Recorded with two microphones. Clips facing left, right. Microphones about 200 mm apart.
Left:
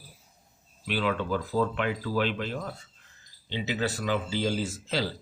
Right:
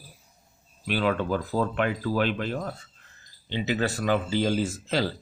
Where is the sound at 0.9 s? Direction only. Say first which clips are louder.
Right 3 dB; 50° right (ahead or behind).